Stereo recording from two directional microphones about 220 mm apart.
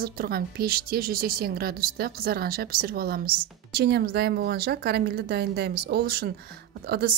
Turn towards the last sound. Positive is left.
turn(degrees=-45)  # may be behind; listen again after turning